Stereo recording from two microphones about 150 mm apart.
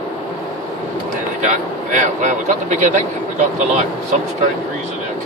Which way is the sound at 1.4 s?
55° right (ahead or behind).